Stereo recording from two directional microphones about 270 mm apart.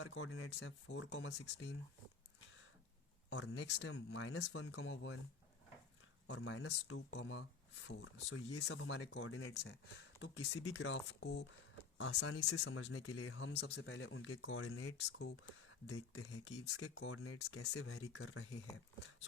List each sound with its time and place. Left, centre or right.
0.0 s speech: left
3.2 s speech: left
6.2 s speech: left